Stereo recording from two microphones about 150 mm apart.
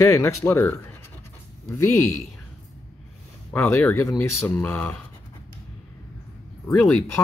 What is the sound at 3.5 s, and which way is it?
Speech, 15° left (ahead or behind).